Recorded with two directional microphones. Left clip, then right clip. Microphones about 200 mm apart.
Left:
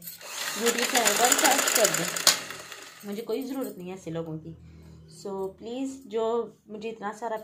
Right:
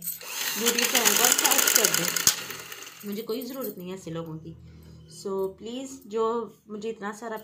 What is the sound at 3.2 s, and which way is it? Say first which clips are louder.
Speech: left 1 dB; 25° left (ahead or behind).